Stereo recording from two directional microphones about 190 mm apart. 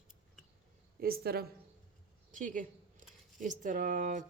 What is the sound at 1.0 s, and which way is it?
Speech, 50° right (ahead or behind).